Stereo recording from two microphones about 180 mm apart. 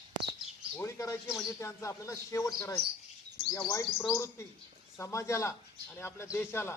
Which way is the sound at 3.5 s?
20° left (ahead or behind).